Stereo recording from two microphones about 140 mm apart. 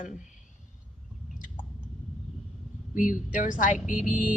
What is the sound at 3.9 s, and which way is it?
Speech, 10° right (ahead or behind).